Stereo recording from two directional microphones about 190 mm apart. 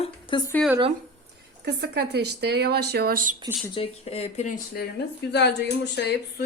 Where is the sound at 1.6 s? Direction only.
60° right (ahead or behind).